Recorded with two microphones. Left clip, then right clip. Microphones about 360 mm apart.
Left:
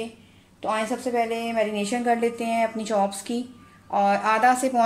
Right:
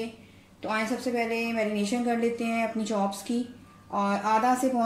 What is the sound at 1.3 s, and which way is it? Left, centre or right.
A woman's voice, left.